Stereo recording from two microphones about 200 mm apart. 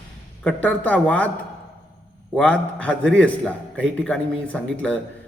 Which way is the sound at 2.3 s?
5° left (ahead or behind).